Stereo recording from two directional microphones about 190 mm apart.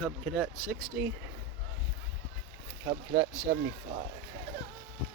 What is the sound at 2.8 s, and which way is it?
Speech, 15° right (ahead or behind).